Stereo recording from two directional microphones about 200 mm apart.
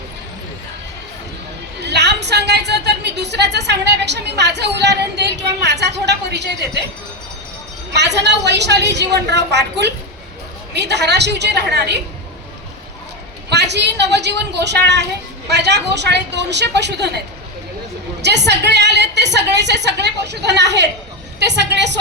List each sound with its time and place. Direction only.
1.9 s a woman's voice: 55° right (ahead or behind)
7.9 s a woman's voice: 60° right (ahead or behind)
13.5 s a woman's voice: 55° right (ahead or behind)
18.4 s a woman's voice: 60° right (ahead or behind)